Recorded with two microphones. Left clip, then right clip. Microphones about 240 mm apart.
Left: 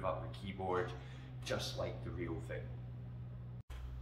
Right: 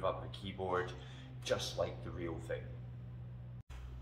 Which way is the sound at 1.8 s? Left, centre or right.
Right.